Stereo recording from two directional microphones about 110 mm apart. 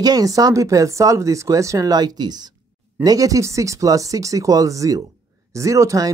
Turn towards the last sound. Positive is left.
turn(degrees=-30)  # may be behind; listen again after turning